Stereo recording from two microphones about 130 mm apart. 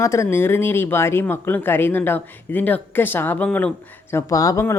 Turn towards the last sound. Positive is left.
turn(degrees=25)  # may be behind; listen again after turning